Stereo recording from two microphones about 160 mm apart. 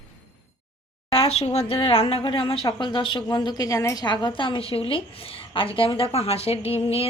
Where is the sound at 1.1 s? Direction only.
40° left (ahead or behind).